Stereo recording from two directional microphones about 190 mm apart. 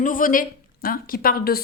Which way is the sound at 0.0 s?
45° left (ahead or behind).